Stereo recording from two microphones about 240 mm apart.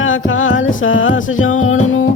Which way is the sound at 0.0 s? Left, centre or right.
Left.